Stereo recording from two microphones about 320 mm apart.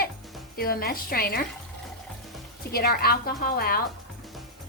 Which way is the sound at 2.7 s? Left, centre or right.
Left.